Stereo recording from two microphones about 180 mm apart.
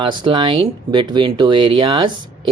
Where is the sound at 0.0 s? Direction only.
25° right (ahead or behind).